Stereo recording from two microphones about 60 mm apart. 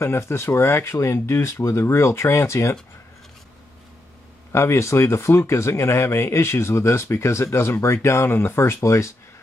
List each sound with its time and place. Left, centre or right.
0.0 s speech: left
4.5 s speech: left
8.5 s speech: left